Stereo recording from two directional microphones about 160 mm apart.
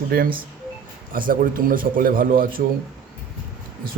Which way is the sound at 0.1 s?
65° right (ahead or behind).